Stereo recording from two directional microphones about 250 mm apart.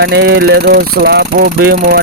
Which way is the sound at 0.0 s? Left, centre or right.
Right.